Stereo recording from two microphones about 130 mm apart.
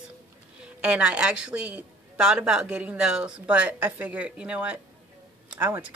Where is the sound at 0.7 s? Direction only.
10° right (ahead or behind).